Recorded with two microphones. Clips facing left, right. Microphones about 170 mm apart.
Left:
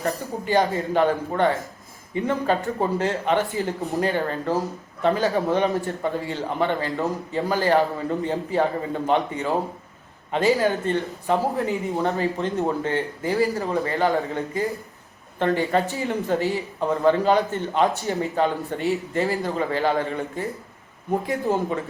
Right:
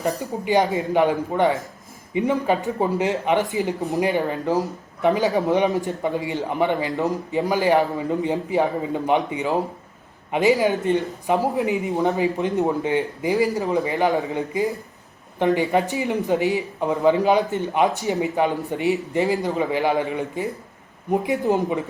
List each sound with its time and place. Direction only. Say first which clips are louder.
0.0 s a man's voice: right 2 dB; 15° right (ahead or behind)